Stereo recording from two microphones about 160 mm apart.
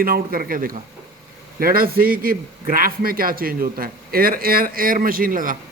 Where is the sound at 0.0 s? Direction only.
65° right (ahead or behind).